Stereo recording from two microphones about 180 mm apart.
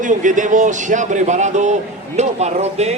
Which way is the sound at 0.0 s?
45° right (ahead or behind).